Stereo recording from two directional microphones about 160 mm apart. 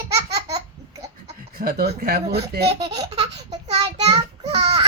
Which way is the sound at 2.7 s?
35° right (ahead or behind).